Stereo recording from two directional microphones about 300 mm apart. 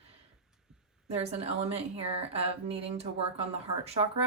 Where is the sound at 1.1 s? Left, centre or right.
Centre.